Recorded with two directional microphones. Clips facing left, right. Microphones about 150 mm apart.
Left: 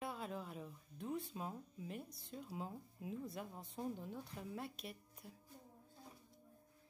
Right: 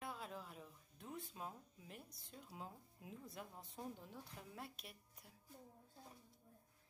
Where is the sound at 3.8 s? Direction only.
20° left (ahead or behind).